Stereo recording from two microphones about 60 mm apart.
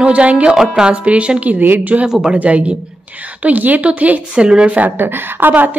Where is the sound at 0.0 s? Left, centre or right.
Right.